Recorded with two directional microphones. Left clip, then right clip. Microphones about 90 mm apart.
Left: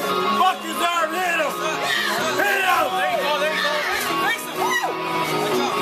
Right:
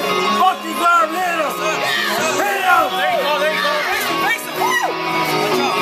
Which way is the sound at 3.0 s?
10° right (ahead or behind).